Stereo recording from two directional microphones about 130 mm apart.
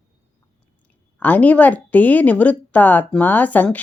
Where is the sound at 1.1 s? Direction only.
10° left (ahead or behind).